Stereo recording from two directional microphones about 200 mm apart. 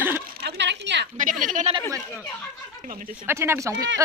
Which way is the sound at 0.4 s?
60° right (ahead or behind).